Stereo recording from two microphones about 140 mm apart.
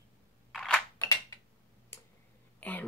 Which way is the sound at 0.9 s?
25° left (ahead or behind).